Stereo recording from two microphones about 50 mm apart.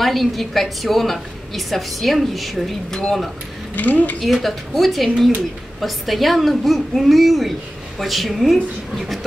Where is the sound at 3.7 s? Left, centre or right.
Left.